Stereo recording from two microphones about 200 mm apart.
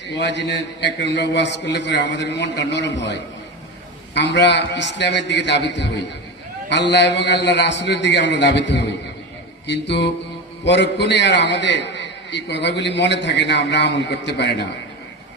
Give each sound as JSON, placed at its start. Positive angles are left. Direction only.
{"t": 0.1, "sound": "a man's voice", "side_deg": 60}